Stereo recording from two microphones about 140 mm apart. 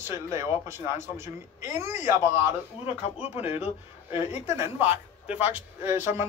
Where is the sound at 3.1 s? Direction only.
40° left (ahead or behind).